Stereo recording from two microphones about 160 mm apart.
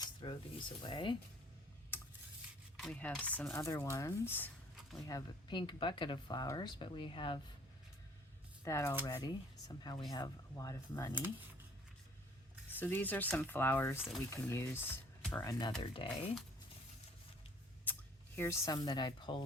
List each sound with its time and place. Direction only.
0.0 s cutlery: 30° left (ahead or behind)
0.8 s speech: 30° left (ahead or behind)
2.7 s speech: 5° left (ahead or behind)
4.8 s a sound: centre (ahead or behind)
5.0 s speech: 25° left (ahead or behind)
8.6 s speech: 20° left (ahead or behind)
12.7 s speech: 10° left (ahead or behind)
15.8 s speech: 35° left (ahead or behind)
17.9 s a sound: 10° left (ahead or behind)
18.3 s speech: 20° left (ahead or behind)